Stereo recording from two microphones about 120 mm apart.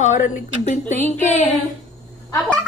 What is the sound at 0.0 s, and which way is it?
Speech, 85° left.